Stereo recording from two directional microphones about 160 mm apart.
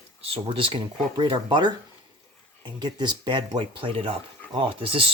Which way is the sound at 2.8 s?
30° right (ahead or behind).